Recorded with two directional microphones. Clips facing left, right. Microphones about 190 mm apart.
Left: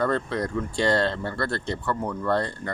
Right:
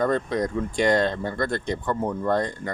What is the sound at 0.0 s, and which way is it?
Speech, 15° right (ahead or behind).